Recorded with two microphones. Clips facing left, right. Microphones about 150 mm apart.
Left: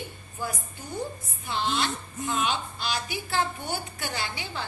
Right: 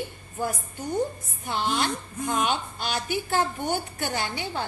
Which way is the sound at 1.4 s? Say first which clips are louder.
Right 2 dB; 50° right (ahead or behind).